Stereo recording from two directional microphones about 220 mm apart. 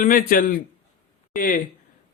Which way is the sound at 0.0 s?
40° left (ahead or behind).